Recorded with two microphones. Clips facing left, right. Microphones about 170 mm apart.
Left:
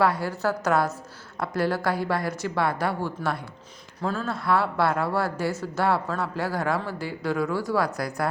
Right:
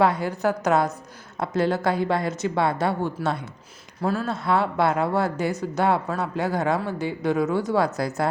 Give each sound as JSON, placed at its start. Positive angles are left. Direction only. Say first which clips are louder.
{"t": 0.0, "sound": "a woman's voice", "louder": "right 2 dB", "side_deg": -20}
{"t": 4.0, "sound": "speech", "louder": "right 3 dB", "side_deg": -10}
{"t": 4.3, "sound": "a woman's voice", "louder": "right 1 dB", "side_deg": -20}